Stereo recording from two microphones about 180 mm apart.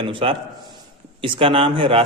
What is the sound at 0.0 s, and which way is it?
A man's voice, 30° right (ahead or behind).